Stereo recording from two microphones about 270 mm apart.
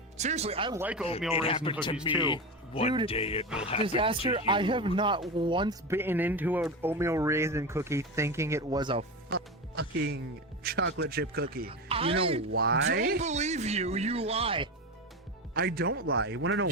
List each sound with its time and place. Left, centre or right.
0.2 s speech: right
0.8 s speech: centre
1.3 s speech: left
3.8 s speech: centre
9.3 s music: right
10.6 s speech: right
11.7 s speech: right
12.5 s speech: right; by 14.7 s centre
15.5 s speech: right